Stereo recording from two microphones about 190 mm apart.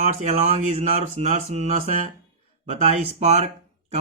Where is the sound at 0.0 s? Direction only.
35° right (ahead or behind).